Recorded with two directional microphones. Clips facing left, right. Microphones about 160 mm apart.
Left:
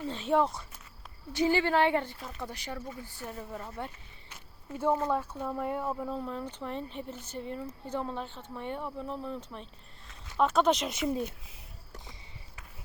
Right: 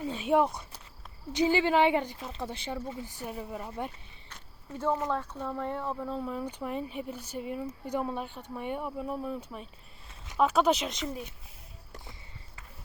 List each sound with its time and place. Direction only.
0.1 s a woman's voice: 10° right (ahead or behind)
4.3 s a sound: 10° left (ahead or behind)
5.0 s speech: 10° left (ahead or behind)
6.2 s speech: 10° right (ahead or behind)